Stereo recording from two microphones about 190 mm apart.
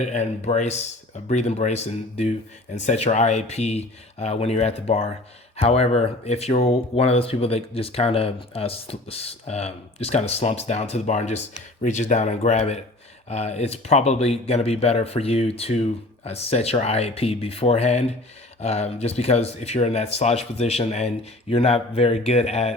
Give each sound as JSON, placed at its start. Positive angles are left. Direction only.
{"t": 0.0, "sound": "speech", "side_deg": 35}